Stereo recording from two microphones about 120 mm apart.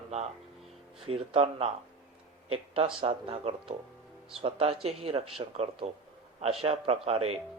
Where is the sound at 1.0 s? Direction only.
55° right (ahead or behind).